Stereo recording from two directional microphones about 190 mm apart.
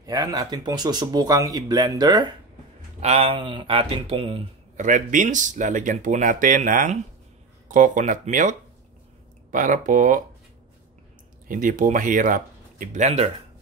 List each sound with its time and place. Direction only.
0.0 s speech: 20° right (ahead or behind)
3.0 s speech: 35° right (ahead or behind)
11.4 s speech: 45° right (ahead or behind)